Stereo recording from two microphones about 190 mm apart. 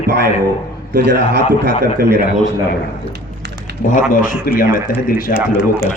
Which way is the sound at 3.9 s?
45° left (ahead or behind).